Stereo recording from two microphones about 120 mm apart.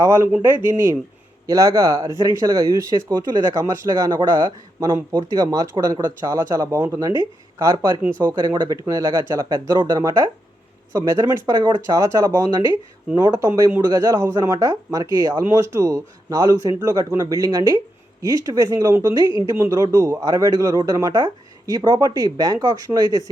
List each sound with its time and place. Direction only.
0.0 s speech: 20° right (ahead or behind)